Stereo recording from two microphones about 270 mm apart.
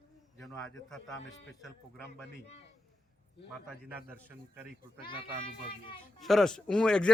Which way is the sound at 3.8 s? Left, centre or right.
Centre.